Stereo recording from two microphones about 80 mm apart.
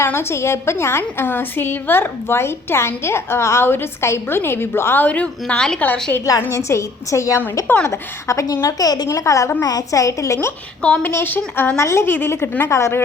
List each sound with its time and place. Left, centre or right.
0.0 s a woman's voice: left
5.0 s a woman's voice: centre
5.8 s a woman's voice: left
6.5 s a woman's voice: left
8.6 s a woman's voice: left
10.8 s a woman's voice: centre
11.8 s a woman's voice: left
12.7 s a woman's voice: left